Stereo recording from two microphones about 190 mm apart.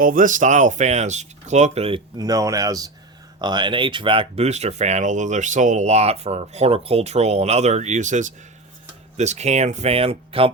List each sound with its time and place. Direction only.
0.0 s speech: 45° right (ahead or behind)
2.1 s speech: 20° right (ahead or behind)